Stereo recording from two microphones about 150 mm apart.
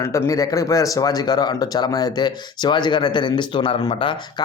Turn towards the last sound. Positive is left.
turn(degrees=30)  # may be behind; listen again after turning